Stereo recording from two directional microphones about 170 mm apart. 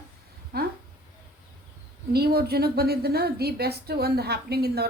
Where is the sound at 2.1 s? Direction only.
65° right (ahead or behind).